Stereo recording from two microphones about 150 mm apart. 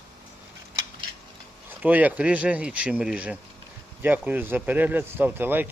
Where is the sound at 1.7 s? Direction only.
10° right (ahead or behind).